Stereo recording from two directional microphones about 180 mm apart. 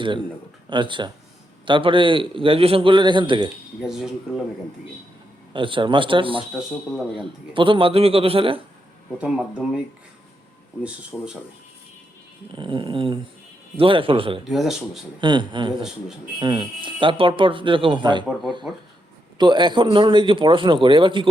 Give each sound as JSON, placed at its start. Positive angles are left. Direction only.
{"t": 0.7, "sound": "a man's voice", "side_deg": -25}
{"t": 3.8, "sound": "speech", "side_deg": 0}
{"t": 5.5, "sound": "a man's voice", "side_deg": -30}
{"t": 7.5, "sound": "a man's voice", "side_deg": -30}
{"t": 9.1, "sound": "speech", "side_deg": -5}
{"t": 11.1, "sound": "speech", "side_deg": 5}
{"t": 12.5, "sound": "a man's voice", "side_deg": -25}
{"t": 14.4, "sound": "speech", "side_deg": 0}
{"t": 15.2, "sound": "a man's voice", "side_deg": -25}
{"t": 15.7, "sound": "speech", "side_deg": -5}
{"t": 16.4, "sound": "a man's voice", "side_deg": -25}
{"t": 19.4, "sound": "a man's voice", "side_deg": -25}